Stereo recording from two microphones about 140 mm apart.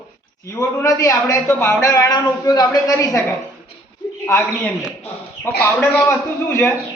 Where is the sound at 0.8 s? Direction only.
20° left (ahead or behind).